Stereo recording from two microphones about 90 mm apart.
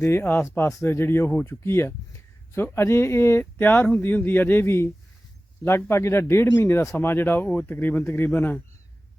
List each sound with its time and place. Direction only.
0.0 s speech: 25° left (ahead or behind)